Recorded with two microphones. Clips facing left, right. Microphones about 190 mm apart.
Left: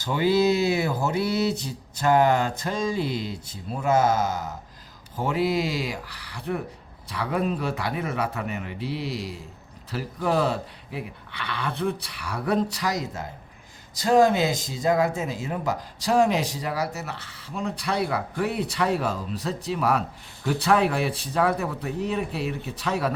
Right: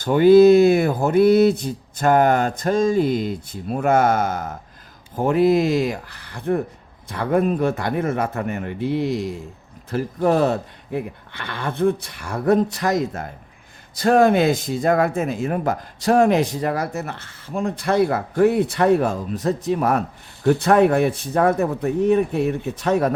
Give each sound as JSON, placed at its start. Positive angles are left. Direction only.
{"t": 0.0, "sound": "speech", "side_deg": -55}